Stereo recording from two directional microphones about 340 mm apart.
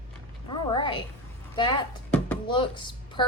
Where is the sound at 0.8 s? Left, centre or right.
Centre.